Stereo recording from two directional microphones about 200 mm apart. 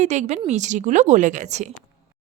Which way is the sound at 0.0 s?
35° right (ahead or behind).